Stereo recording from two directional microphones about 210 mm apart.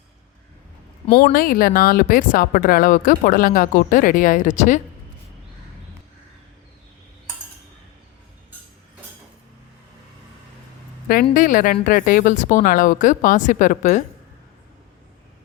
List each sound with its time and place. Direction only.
1.2 s speech: 45° left (ahead or behind)
11.1 s speech: 45° left (ahead or behind)